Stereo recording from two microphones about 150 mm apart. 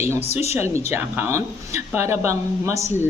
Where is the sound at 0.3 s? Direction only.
45° left (ahead or behind).